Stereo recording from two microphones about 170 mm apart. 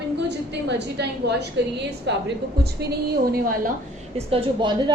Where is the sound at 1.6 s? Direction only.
90° right.